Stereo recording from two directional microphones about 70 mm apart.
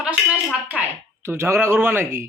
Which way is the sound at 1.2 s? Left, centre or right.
Right.